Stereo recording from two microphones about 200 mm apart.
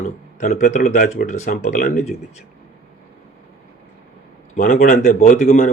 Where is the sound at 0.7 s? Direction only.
40° left (ahead or behind).